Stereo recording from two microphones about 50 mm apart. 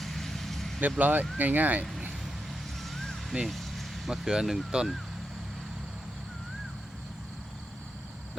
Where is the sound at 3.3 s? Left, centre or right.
Centre.